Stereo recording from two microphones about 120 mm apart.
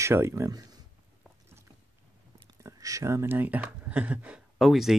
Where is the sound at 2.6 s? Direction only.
30° right (ahead or behind); by 5.0 s centre (ahead or behind).